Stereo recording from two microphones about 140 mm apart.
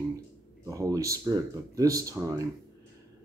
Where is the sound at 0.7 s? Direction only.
25° right (ahead or behind).